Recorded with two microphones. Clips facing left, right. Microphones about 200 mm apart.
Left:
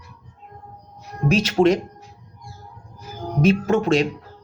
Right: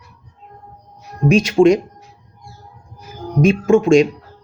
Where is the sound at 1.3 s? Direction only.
15° right (ahead or behind).